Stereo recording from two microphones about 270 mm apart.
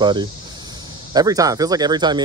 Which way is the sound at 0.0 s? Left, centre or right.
Centre.